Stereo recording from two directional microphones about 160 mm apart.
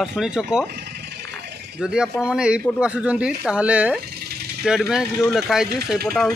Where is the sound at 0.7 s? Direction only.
90° right.